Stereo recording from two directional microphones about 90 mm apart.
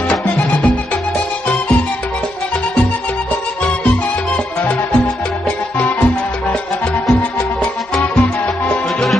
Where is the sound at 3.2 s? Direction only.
15° left (ahead or behind).